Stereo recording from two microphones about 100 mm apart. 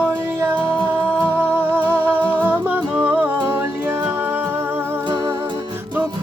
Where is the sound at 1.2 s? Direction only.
20° right (ahead or behind).